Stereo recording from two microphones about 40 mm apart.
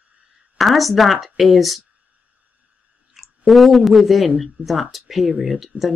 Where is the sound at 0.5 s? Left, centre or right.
Centre.